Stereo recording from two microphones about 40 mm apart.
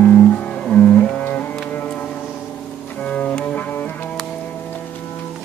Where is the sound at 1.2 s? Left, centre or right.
Left.